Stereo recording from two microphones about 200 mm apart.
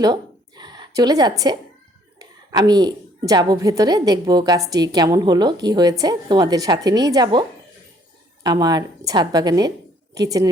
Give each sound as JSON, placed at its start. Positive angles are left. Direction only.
{"t": 0.0, "sound": "a sound", "side_deg": -20}
{"t": 2.1, "sound": "a woman's voice", "side_deg": -20}
{"t": 8.4, "sound": "a woman's voice", "side_deg": -20}